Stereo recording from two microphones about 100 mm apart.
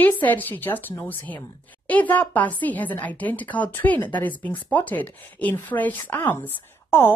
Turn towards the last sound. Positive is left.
turn(degrees=20)  # may be behind; listen again after turning